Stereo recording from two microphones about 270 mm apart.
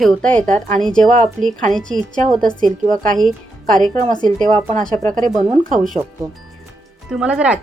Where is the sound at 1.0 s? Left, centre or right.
Right.